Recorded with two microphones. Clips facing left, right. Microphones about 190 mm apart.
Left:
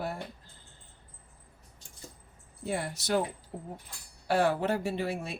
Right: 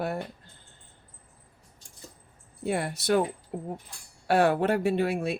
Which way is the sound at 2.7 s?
60° right (ahead or behind).